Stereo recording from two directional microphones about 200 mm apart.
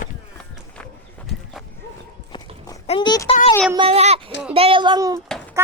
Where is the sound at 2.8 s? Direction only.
25° left (ahead or behind).